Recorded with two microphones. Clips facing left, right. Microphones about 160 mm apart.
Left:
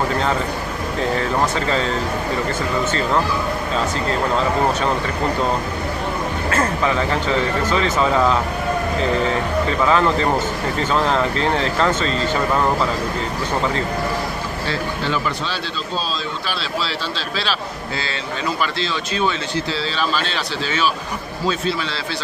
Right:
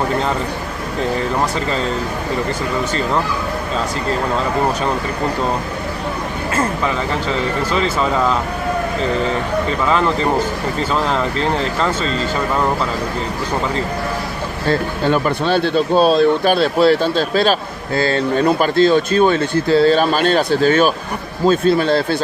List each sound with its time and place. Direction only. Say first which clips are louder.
14.7 s speech: right 8 dB; 50° right (ahead or behind)